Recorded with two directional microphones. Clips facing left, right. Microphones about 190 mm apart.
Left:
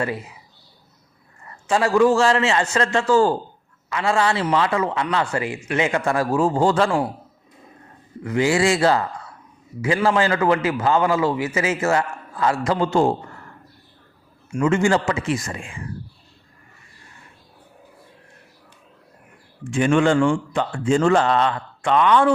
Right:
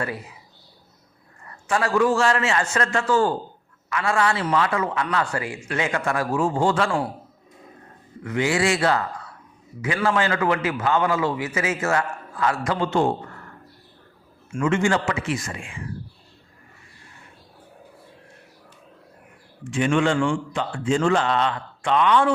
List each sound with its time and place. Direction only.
1.6 s a man's voice: 25° left (ahead or behind)
8.2 s a man's voice: 30° left (ahead or behind)
14.6 s a man's voice: 35° left (ahead or behind)
19.7 s a man's voice: 45° left (ahead or behind)